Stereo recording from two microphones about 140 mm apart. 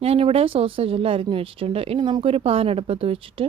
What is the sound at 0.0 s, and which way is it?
Speech, 45° right (ahead or behind).